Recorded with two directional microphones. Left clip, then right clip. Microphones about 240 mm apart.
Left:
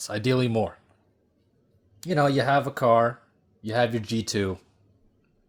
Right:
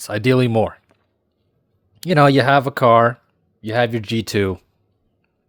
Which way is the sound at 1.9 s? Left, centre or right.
Right.